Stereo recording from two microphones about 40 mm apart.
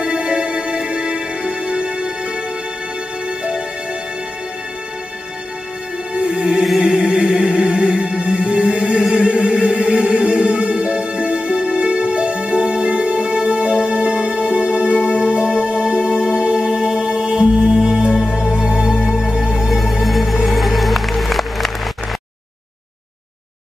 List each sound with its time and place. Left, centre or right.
0.0 s music: right
6.8 s music: right
19.7 s music: centre